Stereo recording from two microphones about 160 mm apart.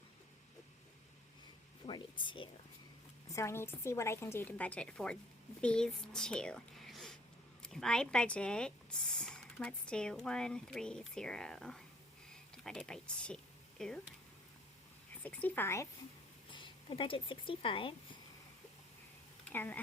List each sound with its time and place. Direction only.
1.9 s speech: 30° left (ahead or behind)
3.2 s a woman's voice: 20° left (ahead or behind)
15.2 s a woman's voice: 10° left (ahead or behind)
16.5 s speech: 30° left (ahead or behind)
19.5 s a woman's voice: 10° left (ahead or behind)